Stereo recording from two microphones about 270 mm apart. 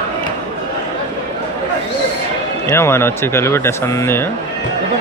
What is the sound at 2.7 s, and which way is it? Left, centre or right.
Speech, centre.